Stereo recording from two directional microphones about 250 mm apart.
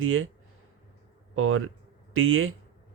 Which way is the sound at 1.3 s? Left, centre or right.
Right.